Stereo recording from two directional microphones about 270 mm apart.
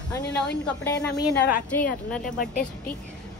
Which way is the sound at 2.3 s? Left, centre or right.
Left.